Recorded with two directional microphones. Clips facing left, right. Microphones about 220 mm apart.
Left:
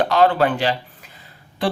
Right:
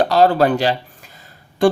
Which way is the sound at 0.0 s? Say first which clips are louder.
Right 3 dB; 35° right (ahead or behind).